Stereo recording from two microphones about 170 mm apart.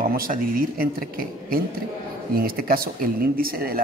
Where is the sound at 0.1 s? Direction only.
55° right (ahead or behind).